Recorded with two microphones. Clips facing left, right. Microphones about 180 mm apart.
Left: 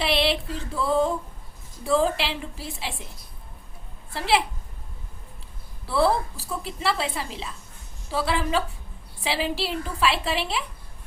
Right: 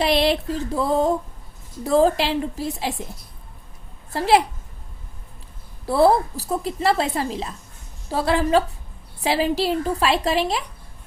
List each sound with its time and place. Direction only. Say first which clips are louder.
0.0 s a sound: right 5 dB; 40° right (ahead or behind)
1.8 s a woman's voice: right 5 dB; 40° right (ahead or behind)
4.1 s a woman's voice: right 6 dB; 45° right (ahead or behind)
5.8 s a woman's voice: right 6 dB; 40° right (ahead or behind)